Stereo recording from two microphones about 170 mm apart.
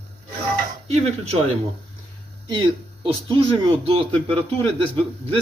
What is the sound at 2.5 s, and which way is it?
A man's voice, 30° right (ahead or behind).